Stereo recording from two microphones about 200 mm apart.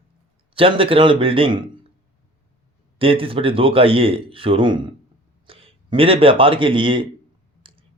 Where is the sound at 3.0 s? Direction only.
25° right (ahead or behind).